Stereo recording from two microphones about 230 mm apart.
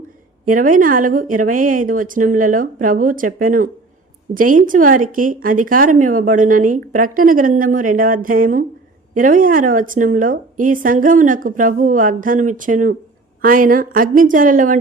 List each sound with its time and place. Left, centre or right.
0.4 s speech: right